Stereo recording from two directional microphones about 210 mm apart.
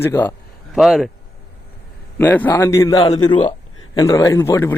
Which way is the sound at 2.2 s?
10° left (ahead or behind).